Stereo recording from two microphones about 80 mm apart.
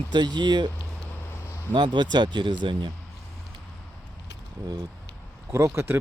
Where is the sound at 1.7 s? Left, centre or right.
Right.